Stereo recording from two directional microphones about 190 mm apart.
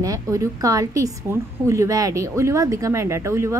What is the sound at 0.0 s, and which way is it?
A woman's voice, 15° right (ahead or behind).